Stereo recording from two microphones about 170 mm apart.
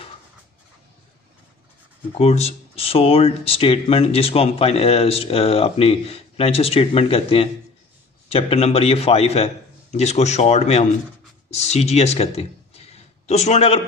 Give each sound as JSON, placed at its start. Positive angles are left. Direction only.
{"t": 2.1, "sound": "speech", "side_deg": 40}